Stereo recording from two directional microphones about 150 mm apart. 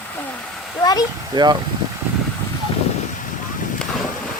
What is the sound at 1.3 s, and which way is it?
Speech, 30° right (ahead or behind).